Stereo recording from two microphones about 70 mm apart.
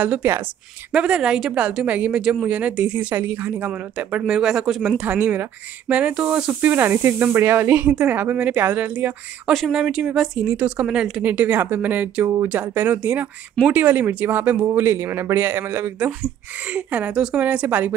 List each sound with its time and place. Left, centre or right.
0.0 s a woman's voice: right; by 4.9 s centre
4.9 s speech: right
6.7 s a man's voice: right
9.5 s speech: centre
10.5 s speech: centre
11.2 s a woman's voice: right
14.7 s a man's voice: right
16.1 s a woman's voice: right